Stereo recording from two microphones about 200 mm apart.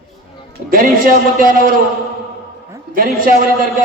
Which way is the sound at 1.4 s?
45° right (ahead or behind).